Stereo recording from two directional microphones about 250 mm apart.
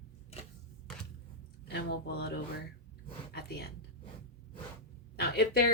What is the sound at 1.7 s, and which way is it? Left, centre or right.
Speech, left.